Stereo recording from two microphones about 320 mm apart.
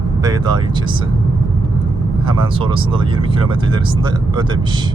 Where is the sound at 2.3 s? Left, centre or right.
Centre.